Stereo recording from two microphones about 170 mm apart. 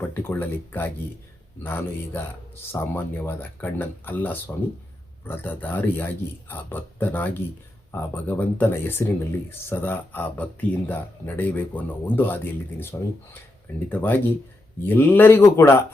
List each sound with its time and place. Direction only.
0.1 s speech: 10° left (ahead or behind)